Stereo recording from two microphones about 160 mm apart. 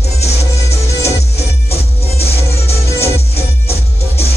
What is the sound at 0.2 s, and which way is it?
Music, 40° left (ahead or behind).